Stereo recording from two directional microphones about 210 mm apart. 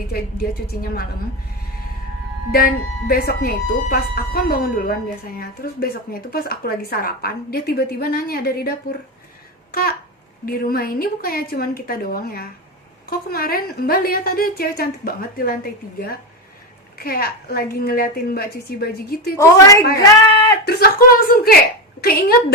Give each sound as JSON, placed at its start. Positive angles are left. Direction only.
{"t": 0.1, "sound": "speech", "side_deg": 45}
{"t": 2.5, "sound": "speech", "side_deg": 45}
{"t": 10.4, "sound": "speech", "side_deg": 45}
{"t": 19.4, "sound": "a woman's voice", "side_deg": 15}
{"t": 20.7, "sound": "speech", "side_deg": 45}